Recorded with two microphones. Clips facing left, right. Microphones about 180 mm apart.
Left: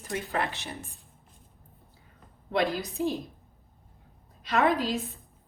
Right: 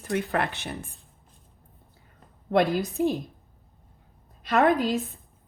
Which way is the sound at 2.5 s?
55° right (ahead or behind).